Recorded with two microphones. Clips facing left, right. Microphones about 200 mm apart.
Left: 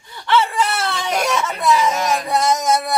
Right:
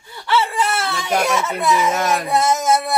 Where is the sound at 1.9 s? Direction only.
55° right (ahead or behind).